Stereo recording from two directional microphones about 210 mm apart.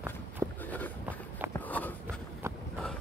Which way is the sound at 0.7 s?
5° left (ahead or behind).